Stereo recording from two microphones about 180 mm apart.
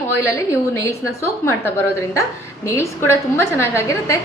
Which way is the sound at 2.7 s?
15° left (ahead or behind).